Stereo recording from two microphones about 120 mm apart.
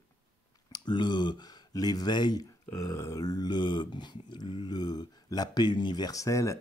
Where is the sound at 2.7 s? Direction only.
25° left (ahead or behind).